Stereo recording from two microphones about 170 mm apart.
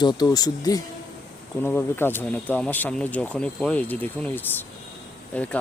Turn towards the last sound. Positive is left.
turn(degrees=10)  # may be behind; listen again after turning